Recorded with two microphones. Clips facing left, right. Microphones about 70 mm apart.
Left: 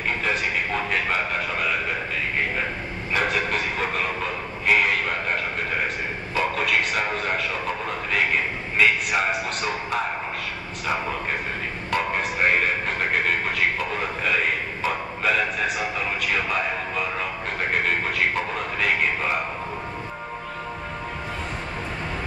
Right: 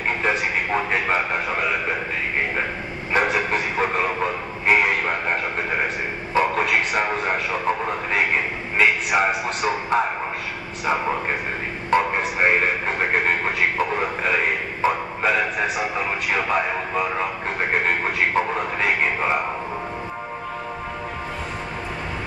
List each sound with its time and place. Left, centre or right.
0.2 s a man's voice: right
3.1 s a sound: right
11.9 s a man's voice: right